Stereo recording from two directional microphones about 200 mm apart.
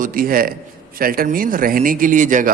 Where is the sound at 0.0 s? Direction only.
45° right (ahead or behind).